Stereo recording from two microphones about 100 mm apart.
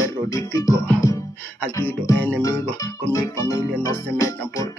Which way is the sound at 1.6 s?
20° left (ahead or behind).